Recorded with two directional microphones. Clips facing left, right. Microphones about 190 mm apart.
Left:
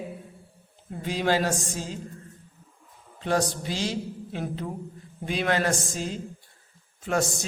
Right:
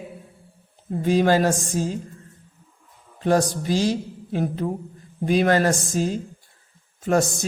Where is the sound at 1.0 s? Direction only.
45° right (ahead or behind).